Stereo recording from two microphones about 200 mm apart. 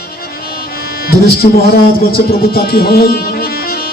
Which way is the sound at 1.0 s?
50° left (ahead or behind).